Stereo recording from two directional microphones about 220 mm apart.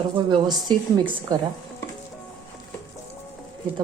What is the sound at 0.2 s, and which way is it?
Speech, 20° right (ahead or behind).